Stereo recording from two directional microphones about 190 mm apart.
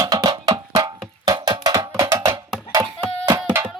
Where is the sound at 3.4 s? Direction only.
5° right (ahead or behind).